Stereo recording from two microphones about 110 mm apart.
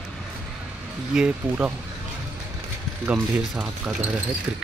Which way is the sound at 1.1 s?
10° right (ahead or behind).